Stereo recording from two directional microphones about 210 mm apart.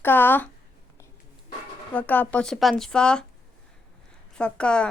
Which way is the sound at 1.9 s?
5° left (ahead or behind).